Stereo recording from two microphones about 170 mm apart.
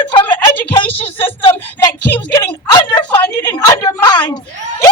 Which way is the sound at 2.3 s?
25° left (ahead or behind).